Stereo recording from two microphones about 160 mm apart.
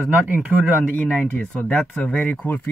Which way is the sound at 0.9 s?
10° left (ahead or behind).